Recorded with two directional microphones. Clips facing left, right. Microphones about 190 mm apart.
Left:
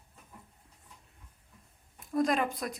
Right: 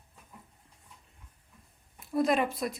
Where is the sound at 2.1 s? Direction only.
5° right (ahead or behind).